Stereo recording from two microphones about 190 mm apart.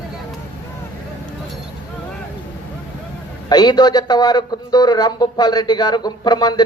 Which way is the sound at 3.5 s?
20° left (ahead or behind).